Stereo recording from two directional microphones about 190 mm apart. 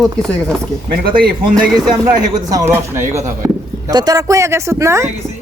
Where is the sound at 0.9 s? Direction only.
55° right (ahead or behind).